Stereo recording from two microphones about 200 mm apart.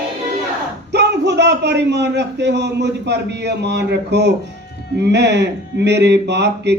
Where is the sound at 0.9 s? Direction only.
60° right (ahead or behind).